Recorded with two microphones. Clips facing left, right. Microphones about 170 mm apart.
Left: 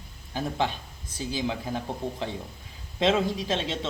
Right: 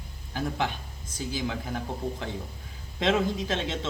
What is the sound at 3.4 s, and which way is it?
Speech, 20° left (ahead or behind).